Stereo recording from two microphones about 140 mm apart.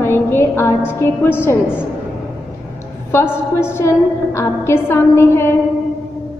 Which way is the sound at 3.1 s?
20° left (ahead or behind).